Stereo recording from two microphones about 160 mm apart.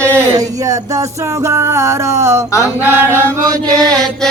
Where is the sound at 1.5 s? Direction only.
20° right (ahead or behind).